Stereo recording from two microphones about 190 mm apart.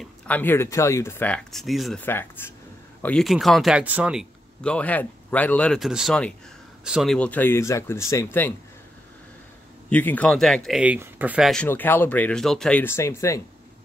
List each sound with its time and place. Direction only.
0.0 s speech: 10° left (ahead or behind)
2.0 s speech: 10° left (ahead or behind)
9.8 s speech: 10° left (ahead or behind)